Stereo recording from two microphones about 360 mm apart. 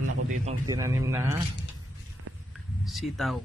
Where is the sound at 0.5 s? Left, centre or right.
Centre.